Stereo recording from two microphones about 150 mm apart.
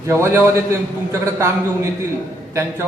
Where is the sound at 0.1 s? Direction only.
20° right (ahead or behind).